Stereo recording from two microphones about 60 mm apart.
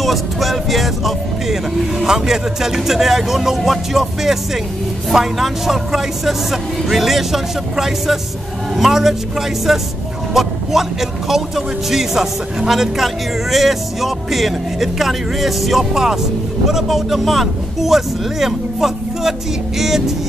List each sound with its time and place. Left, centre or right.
0.0 s speech: centre